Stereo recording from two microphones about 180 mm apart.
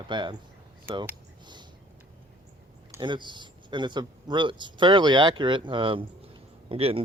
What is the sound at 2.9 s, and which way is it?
Speech, 25° right (ahead or behind).